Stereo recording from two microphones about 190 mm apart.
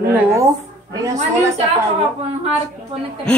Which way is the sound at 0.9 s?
15° right (ahead or behind).